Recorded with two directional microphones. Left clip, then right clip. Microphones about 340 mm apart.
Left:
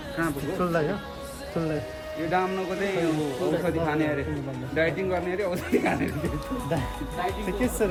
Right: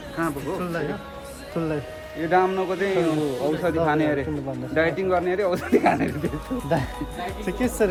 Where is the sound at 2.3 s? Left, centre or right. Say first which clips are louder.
Right 6 dB; right.